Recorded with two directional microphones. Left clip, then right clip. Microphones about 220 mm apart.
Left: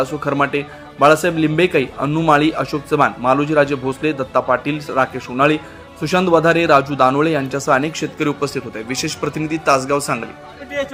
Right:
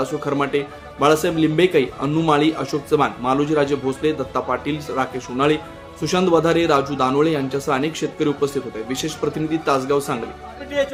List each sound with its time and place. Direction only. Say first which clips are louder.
0.0 s speech: left 4 dB; 20° left (ahead or behind)